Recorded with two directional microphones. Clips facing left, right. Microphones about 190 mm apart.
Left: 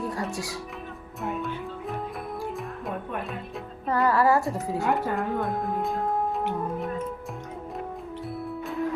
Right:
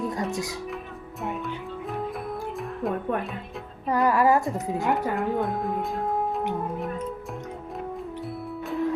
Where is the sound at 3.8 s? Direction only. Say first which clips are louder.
Right 1 dB; 15° right (ahead or behind).